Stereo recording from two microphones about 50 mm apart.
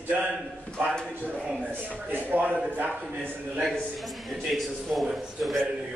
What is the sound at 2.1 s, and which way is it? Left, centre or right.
Speech, right.